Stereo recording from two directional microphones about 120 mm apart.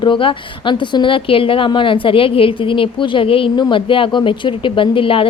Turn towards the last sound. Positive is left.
turn(degrees=50)  # may be behind; listen again after turning